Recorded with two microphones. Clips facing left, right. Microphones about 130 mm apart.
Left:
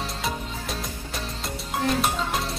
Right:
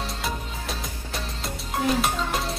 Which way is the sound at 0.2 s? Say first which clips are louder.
Left 1 dB; centre (ahead or behind).